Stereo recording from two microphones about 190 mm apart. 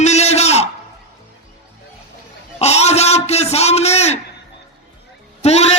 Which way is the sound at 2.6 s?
35° left (ahead or behind).